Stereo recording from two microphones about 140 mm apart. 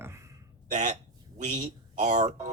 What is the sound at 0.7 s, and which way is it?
Speech, 60° right (ahead or behind).